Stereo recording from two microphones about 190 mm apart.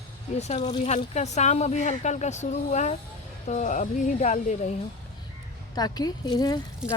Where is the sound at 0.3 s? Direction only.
35° left (ahead or behind).